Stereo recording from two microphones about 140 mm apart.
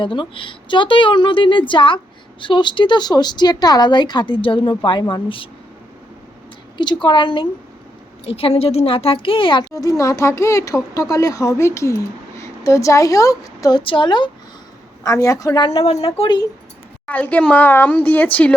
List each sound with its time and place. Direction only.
0.0 s speech: 40° left (ahead or behind)
6.7 s speech: 35° left (ahead or behind)
8.3 s speech: 45° left (ahead or behind)
9.7 s a woman's voice: 25° left (ahead or behind)
15.0 s speech: 25° left (ahead or behind); by 16.4 s 40° left (ahead or behind)
17.1 s a woman's voice: 10° left (ahead or behind)